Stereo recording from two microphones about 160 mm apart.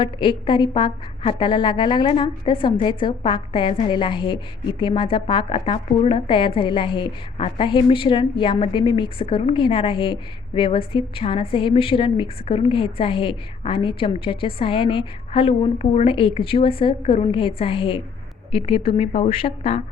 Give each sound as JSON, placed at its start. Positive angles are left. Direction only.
{"t": 0.0, "sound": "a woman's voice", "side_deg": 30}